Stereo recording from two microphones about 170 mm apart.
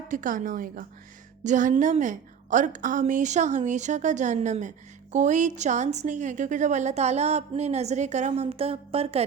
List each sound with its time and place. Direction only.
0.1 s a woman's voice: 50° right (ahead or behind); by 9.2 s 35° right (ahead or behind)